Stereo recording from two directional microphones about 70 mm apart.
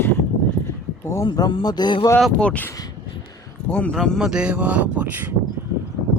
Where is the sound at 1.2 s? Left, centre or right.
Left.